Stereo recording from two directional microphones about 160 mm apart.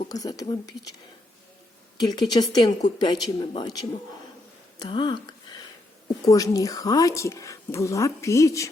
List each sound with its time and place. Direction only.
0.1 s speech: 20° left (ahead or behind)
2.0 s speech: 25° left (ahead or behind)
4.8 s a sound: 30° left (ahead or behind)
6.2 s speech: 20° left (ahead or behind)